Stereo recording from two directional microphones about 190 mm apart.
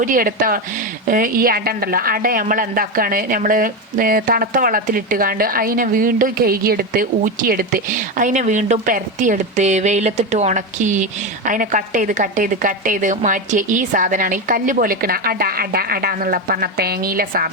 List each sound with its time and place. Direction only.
0.0 s a woman's voice: 45° right (ahead or behind)